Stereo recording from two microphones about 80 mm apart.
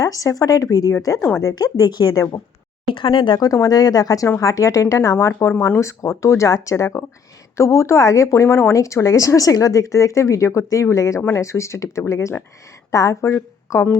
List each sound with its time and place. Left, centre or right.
0.0 s speech: left
1.5 s speech: left
2.9 s speech: left
3.4 s a woman's voice: left